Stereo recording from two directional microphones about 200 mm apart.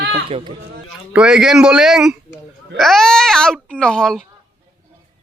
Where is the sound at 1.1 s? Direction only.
5° right (ahead or behind).